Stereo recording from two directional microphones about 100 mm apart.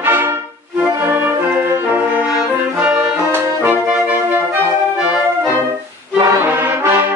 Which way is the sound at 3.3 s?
25° right (ahead or behind).